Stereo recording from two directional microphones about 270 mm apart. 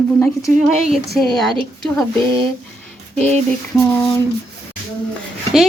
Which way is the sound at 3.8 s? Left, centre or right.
Centre.